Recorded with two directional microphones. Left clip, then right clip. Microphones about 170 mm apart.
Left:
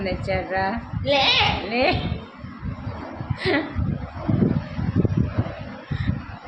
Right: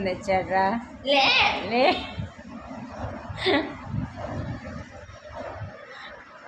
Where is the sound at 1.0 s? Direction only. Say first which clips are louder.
Left 1 dB; 25° left (ahead or behind).